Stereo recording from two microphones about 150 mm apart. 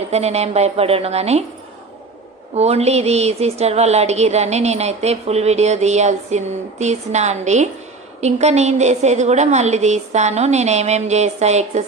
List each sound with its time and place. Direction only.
0.1 s a woman's voice: 45° right (ahead or behind)
2.5 s a woman's voice: 45° right (ahead or behind)